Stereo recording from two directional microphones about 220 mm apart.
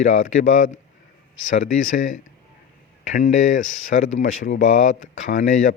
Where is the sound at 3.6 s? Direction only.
65° left (ahead or behind).